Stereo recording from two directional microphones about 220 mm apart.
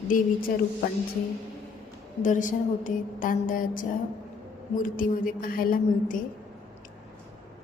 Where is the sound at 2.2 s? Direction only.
35° left (ahead or behind).